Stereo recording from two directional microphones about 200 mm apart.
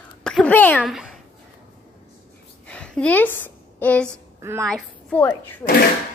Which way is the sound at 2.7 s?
5° left (ahead or behind).